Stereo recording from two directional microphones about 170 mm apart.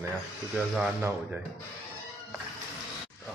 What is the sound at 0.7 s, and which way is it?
Speech, 10° right (ahead or behind).